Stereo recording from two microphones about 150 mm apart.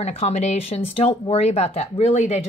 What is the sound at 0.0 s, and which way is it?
Speech, 45° left (ahead or behind).